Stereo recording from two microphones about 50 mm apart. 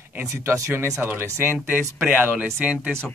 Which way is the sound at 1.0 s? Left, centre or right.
Right.